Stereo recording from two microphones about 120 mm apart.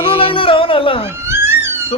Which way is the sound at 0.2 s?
50° left (ahead or behind).